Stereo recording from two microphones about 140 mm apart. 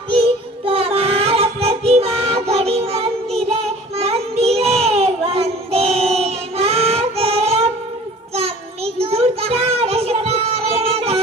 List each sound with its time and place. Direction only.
0.7 s music: 45° right (ahead or behind)
4.0 s child singing: 50° right (ahead or behind)
8.4 s a sound: 45° right (ahead or behind)